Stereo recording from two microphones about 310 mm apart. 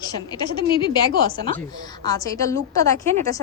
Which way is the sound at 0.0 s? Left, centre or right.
Centre.